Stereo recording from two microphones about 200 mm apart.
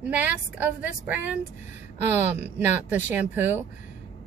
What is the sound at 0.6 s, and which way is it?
Speech, 5° right (ahead or behind).